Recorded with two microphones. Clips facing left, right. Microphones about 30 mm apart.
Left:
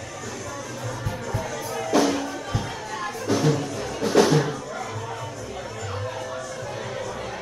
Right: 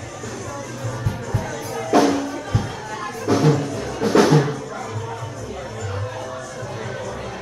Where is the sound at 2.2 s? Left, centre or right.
Centre.